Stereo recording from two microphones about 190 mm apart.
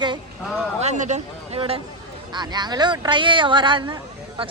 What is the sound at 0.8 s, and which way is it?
Speech, 40° right (ahead or behind).